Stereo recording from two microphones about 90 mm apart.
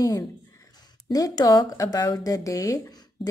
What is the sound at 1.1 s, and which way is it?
A woman's voice, 45° left (ahead or behind).